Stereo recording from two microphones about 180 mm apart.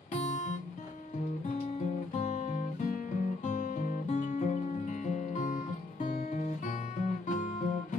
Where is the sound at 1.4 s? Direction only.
40° left (ahead or behind).